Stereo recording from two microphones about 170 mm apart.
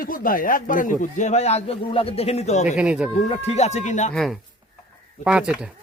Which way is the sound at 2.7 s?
5° right (ahead or behind).